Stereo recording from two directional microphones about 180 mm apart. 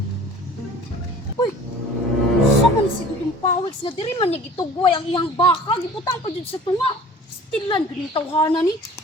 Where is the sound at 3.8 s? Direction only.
30° left (ahead or behind).